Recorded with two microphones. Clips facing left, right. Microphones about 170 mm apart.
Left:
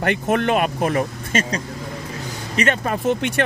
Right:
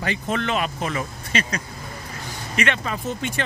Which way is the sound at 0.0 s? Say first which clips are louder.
Left 6 dB; 60° left (ahead or behind).